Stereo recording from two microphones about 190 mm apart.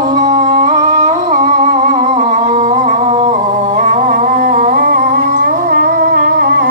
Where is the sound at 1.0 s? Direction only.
35° right (ahead or behind).